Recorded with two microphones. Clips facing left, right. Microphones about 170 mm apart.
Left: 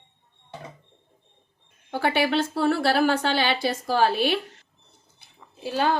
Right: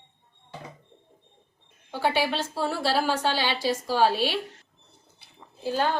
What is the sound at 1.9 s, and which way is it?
A woman's voice, 60° left (ahead or behind).